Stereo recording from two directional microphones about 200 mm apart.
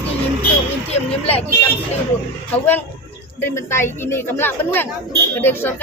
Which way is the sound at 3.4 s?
15° left (ahead or behind).